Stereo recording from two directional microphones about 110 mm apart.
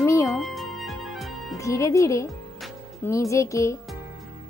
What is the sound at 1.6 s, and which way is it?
Speech, 30° left (ahead or behind).